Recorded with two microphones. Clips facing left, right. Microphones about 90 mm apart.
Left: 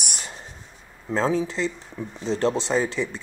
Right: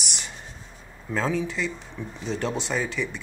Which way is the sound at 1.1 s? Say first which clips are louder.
Left 3 dB; 30° left (ahead or behind).